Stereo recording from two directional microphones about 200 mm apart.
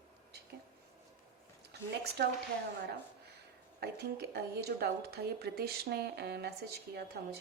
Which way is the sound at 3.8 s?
55° right (ahead or behind).